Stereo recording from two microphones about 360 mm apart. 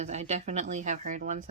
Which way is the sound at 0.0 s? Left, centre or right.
Centre.